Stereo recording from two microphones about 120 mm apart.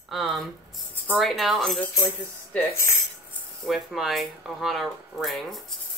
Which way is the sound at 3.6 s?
Centre (ahead or behind).